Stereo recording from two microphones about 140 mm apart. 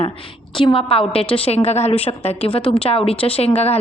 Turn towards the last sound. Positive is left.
turn(degrees=45)  # may be behind; listen again after turning